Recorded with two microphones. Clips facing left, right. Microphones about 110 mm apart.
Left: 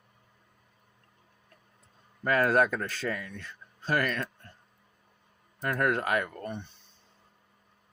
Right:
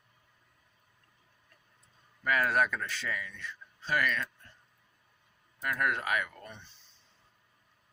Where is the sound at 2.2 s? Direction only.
40° left (ahead or behind).